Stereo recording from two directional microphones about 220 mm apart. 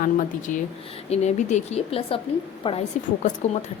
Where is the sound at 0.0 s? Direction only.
35° left (ahead or behind).